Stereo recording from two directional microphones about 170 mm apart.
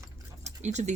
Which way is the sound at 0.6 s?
45° right (ahead or behind).